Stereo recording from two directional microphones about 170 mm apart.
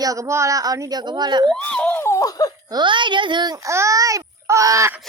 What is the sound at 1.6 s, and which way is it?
Laughter, 10° left (ahead or behind).